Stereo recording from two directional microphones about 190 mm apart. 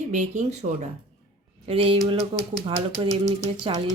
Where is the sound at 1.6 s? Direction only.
30° right (ahead or behind).